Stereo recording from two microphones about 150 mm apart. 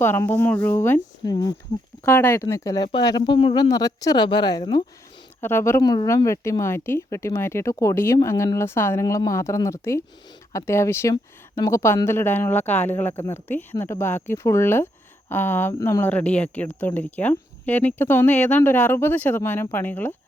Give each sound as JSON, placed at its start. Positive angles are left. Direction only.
{"t": 0.0, "sound": "speech", "side_deg": 15}
{"t": 2.0, "sound": "speech", "side_deg": 15}
{"t": 5.4, "sound": "speech", "side_deg": 15}